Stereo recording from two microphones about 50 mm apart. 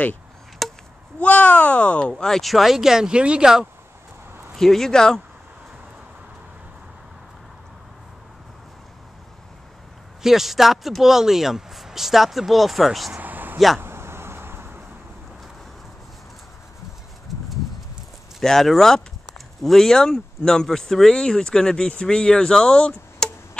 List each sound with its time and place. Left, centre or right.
0.6 s chop: centre
1.2 s speech: left
2.2 s speech: centre
4.6 s speech: centre
10.2 s speech: centre
13.1 s a sound: right
13.7 s a sound: right
18.4 s speech: centre